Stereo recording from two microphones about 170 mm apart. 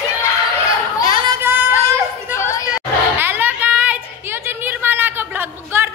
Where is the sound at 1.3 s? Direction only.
10° right (ahead or behind).